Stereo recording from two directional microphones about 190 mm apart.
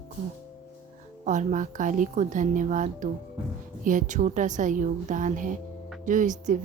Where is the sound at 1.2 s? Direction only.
40° right (ahead or behind).